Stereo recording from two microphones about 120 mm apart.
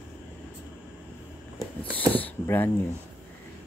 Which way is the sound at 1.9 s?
15° left (ahead or behind).